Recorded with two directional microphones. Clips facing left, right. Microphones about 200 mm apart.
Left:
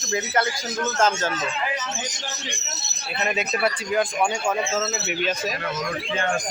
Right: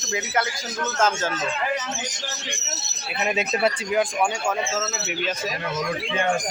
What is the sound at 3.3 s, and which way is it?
Speech, 25° right (ahead or behind).